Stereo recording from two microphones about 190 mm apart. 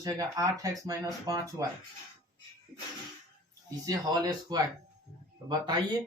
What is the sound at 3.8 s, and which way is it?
Speech, 20° right (ahead or behind).